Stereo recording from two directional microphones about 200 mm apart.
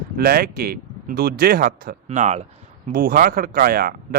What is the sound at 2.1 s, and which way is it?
Speech, 35° right (ahead or behind).